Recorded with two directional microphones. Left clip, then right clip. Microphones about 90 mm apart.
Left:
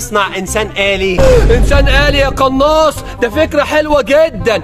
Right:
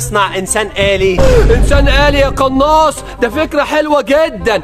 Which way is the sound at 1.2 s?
Centre (ahead or behind).